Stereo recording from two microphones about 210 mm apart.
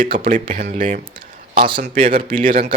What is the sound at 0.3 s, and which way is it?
Speech, 40° right (ahead or behind).